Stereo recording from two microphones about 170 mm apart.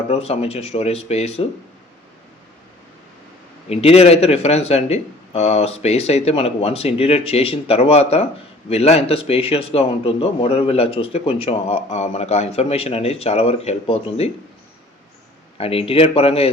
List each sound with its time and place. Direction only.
0.1 s speech: 35° left (ahead or behind)
3.7 s speech: 35° left (ahead or behind)
15.5 s speech: 35° left (ahead or behind)